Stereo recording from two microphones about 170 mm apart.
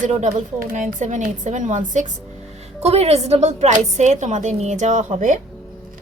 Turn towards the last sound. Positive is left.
turn(degrees=-50)  # may be behind; listen again after turning